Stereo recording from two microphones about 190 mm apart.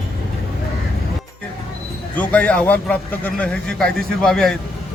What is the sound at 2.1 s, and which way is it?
A man's voice, 5° left (ahead or behind).